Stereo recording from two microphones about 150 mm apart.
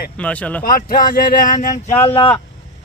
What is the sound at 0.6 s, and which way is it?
Speech, 70° left (ahead or behind).